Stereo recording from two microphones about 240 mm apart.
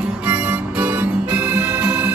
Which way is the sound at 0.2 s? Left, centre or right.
Centre.